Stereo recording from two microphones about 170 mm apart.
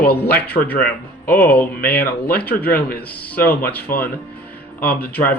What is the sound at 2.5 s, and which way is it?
Speech, 60° left (ahead or behind).